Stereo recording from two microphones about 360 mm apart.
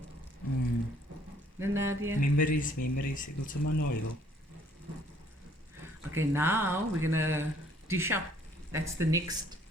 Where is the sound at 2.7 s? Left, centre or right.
Left.